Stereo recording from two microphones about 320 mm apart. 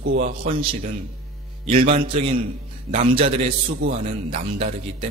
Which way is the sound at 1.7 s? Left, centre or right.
Right.